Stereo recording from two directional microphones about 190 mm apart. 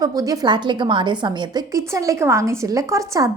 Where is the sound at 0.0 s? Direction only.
20° right (ahead or behind).